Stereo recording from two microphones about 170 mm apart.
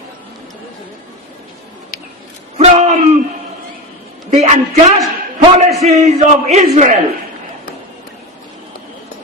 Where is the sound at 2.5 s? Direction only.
40° right (ahead or behind).